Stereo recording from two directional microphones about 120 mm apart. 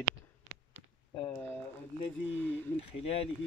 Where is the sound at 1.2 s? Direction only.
20° left (ahead or behind).